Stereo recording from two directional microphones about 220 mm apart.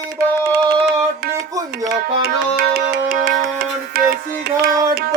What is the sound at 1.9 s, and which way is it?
Music, 45° right (ahead or behind).